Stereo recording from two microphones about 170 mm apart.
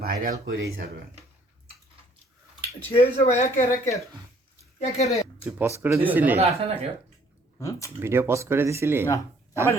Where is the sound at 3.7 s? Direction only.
20° left (ahead or behind).